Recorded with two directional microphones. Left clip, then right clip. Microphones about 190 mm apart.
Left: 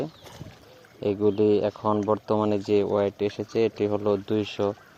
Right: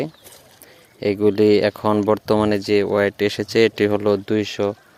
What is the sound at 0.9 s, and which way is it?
Speech, 20° right (ahead or behind).